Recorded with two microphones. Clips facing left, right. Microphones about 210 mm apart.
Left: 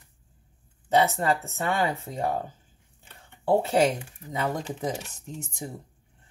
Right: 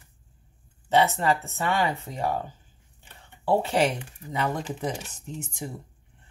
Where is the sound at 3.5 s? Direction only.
50° left (ahead or behind).